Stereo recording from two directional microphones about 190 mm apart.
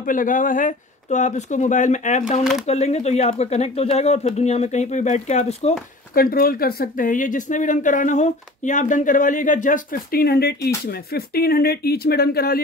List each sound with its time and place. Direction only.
0.0 s speech: 45° left (ahead or behind)
6.1 s speech: 50° left (ahead or behind)